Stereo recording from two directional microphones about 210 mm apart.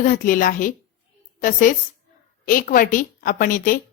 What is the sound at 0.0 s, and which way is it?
A woman's voice, 40° left (ahead or behind).